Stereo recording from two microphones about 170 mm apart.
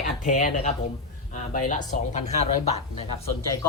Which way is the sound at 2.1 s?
40° left (ahead or behind).